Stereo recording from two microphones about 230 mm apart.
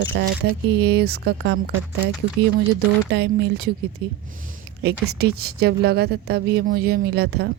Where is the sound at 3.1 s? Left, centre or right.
Right.